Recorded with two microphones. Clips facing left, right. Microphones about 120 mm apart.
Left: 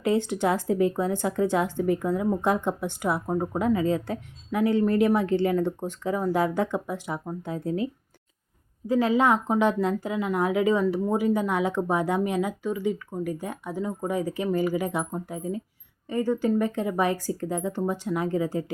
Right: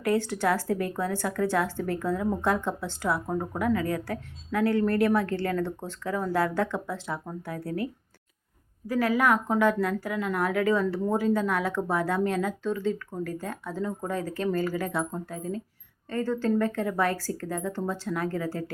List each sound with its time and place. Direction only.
0.0 s speech: 20° left (ahead or behind)
8.9 s a woman's voice: 20° left (ahead or behind)